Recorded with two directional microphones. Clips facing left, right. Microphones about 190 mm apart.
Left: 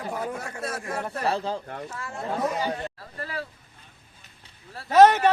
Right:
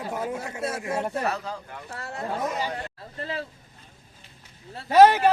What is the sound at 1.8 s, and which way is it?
Speech, 40° right (ahead or behind).